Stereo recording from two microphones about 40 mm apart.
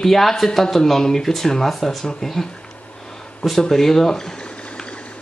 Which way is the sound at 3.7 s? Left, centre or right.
Centre.